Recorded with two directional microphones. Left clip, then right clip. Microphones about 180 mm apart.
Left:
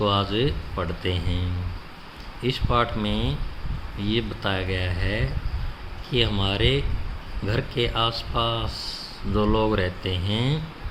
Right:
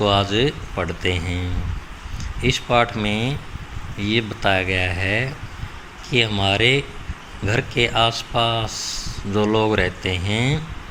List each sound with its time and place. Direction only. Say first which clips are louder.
0.0 s speech: right 5 dB; 15° right (ahead or behind)